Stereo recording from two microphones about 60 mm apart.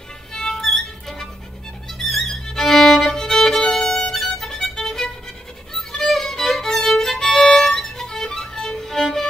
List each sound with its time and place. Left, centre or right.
0.3 s music: centre
2.0 s violin: centre